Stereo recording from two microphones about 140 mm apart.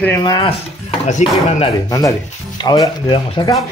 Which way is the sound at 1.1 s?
55° left (ahead or behind).